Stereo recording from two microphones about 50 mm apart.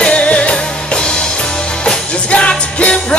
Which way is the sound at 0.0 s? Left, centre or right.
Left.